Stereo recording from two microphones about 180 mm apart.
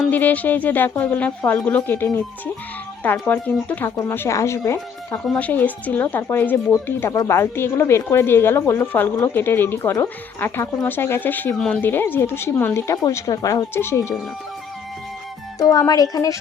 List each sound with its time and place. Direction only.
0.0 s speech: 10° left (ahead or behind)
5.2 s speech: 5° left (ahead or behind)
15.5 s speech: 20° left (ahead or behind)